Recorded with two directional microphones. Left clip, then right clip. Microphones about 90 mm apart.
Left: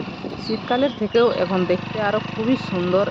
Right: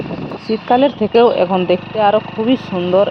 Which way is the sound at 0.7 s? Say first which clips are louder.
Right 8 dB; 50° right (ahead or behind).